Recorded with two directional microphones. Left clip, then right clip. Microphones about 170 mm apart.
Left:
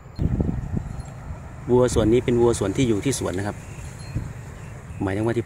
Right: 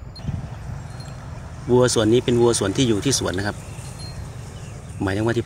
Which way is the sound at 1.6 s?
5° left (ahead or behind).